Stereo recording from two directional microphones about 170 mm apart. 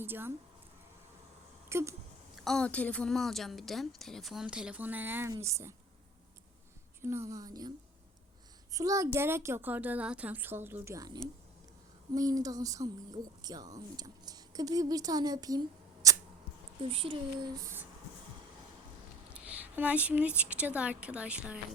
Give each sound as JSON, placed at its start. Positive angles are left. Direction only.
{"t": 0.0, "sound": "a child's voice", "side_deg": -15}
{"t": 1.7, "sound": "a child's voice", "side_deg": -15}
{"t": 2.3, "sound": "a woman's voice", "side_deg": 0}
{"t": 7.0, "sound": "speech", "side_deg": -15}
{"t": 8.7, "sound": "a child's voice", "side_deg": -20}
{"t": 16.0, "sound": "a sound", "side_deg": -20}
{"t": 16.9, "sound": "speech", "side_deg": -30}
{"t": 19.3, "sound": "a woman's voice", "side_deg": -5}